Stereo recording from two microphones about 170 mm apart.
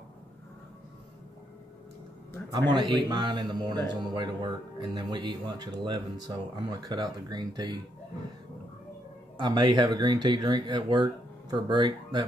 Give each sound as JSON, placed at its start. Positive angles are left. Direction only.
{"t": 2.7, "sound": "speech", "side_deg": -25}
{"t": 9.4, "sound": "speech", "side_deg": -25}